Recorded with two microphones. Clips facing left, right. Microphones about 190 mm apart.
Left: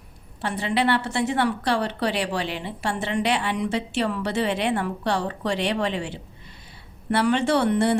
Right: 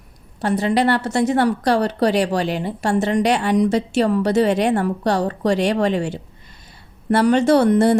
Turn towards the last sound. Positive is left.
turn(degrees=-40)  # may be behind; listen again after turning